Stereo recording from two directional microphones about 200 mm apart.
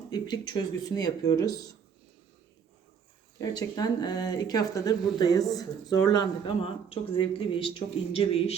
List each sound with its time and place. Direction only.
0.1 s speech: 20° left (ahead or behind)
3.3 s speech: 20° left (ahead or behind)